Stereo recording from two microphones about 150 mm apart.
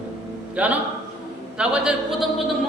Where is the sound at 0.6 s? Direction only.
10° right (ahead or behind).